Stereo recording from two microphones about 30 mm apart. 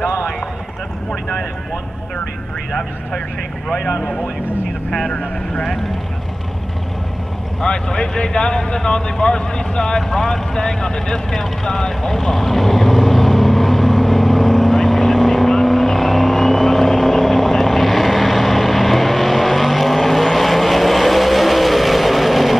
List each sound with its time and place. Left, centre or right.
3.6 s speech: centre
7.6 s speech: left
12.2 s vehicle: centre